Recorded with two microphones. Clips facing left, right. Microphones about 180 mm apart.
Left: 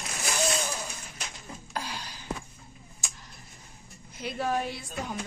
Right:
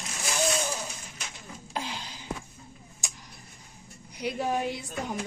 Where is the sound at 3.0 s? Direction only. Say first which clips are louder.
Right 1 dB; 15° right (ahead or behind).